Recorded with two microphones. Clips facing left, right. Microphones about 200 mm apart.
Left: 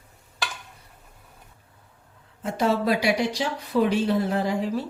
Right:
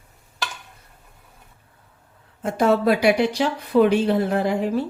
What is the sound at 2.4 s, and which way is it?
A woman's voice, 55° right (ahead or behind).